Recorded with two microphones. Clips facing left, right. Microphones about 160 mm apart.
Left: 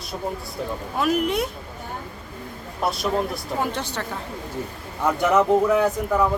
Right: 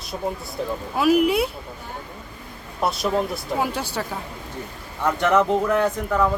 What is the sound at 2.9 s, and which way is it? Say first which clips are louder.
Speech: right 1 dB; centre (ahead or behind).